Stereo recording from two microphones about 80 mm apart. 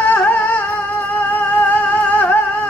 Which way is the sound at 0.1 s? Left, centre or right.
Left.